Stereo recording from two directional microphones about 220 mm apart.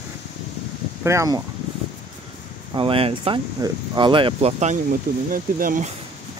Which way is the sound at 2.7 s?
25° right (ahead or behind).